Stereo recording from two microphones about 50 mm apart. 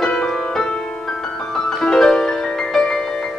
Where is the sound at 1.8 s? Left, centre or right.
Centre.